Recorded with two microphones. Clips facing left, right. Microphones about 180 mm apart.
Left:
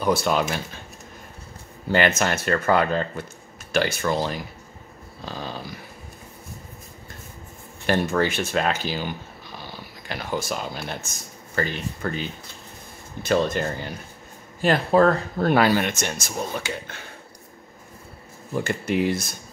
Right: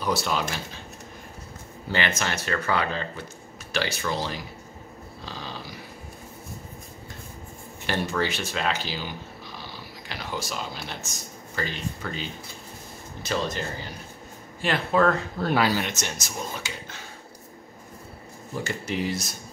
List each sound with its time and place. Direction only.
0.0 s speech: 50° left (ahead or behind)
1.9 s speech: 45° left (ahead or behind)
5.2 s a sound: 50° left (ahead or behind)
7.8 s speech: 50° left (ahead or behind)
10.0 s speech: 50° left (ahead or behind)
14.6 s speech: 40° left (ahead or behind)
15.4 s speech: 55° left (ahead or behind)
18.6 s speech: 55° left (ahead or behind)